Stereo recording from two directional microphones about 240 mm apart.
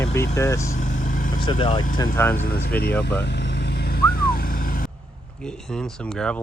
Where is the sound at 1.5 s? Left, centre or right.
Centre.